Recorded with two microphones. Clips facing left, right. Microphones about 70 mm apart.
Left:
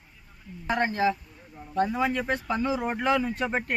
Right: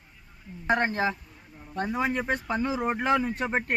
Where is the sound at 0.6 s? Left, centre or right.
Right; by 3.0 s centre.